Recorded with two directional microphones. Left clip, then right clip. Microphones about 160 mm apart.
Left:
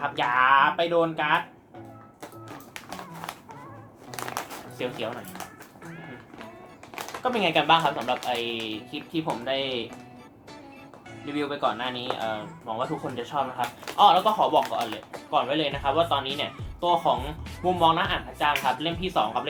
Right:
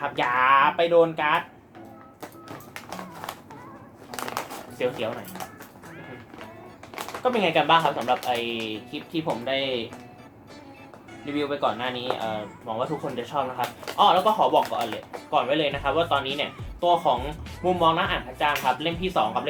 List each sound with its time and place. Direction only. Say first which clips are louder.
0.2 s speech: right 1 dB; 20° left (ahead or behind)
2.7 s a sound: right 1 dB; 20° left (ahead or behind)
6.9 s speech: right 3 dB; 20° left (ahead or behind)
11.3 s speech: right 1 dB; 20° left (ahead or behind)